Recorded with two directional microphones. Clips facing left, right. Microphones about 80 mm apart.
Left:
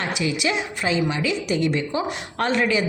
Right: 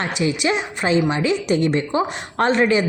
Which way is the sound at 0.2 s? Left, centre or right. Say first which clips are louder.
Right 5 dB; right.